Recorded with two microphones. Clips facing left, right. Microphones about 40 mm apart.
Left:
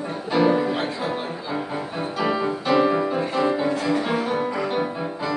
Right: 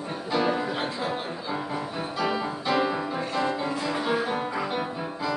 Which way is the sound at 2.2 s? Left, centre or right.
Centre.